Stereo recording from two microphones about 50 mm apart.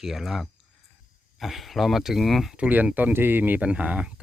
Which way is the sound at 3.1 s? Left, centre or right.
Right.